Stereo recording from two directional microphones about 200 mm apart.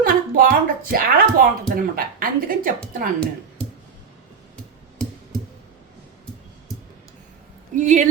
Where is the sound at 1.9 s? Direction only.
45° right (ahead or behind).